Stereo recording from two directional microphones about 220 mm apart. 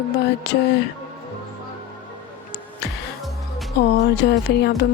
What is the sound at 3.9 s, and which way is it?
Speech, 50° left (ahead or behind).